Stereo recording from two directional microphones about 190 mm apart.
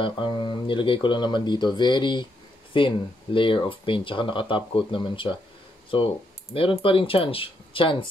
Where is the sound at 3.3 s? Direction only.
25° left (ahead or behind).